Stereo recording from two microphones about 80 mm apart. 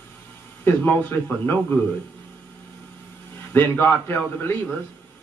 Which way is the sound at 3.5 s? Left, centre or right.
Left.